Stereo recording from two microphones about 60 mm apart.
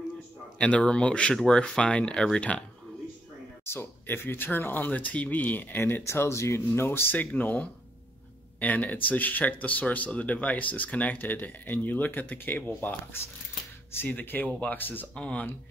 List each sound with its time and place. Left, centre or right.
0.6 s speech: centre
3.6 s speech: left
6.0 s speech: left
15.1 s speech: centre